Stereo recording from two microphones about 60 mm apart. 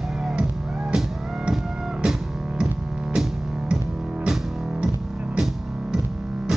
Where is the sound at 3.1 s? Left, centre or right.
Centre.